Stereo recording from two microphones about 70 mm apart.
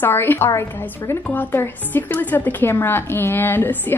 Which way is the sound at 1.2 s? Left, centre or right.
Left.